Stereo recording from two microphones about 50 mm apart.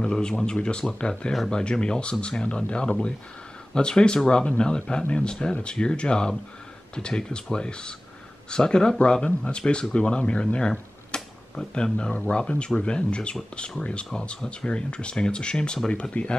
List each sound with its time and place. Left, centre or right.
0.0 s speech: centre